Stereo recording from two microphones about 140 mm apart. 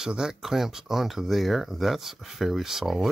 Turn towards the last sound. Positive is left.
turn(degrees=0)  # may be behind; listen again after turning